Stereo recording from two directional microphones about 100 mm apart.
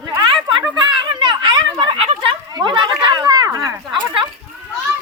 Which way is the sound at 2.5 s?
50° right (ahead or behind).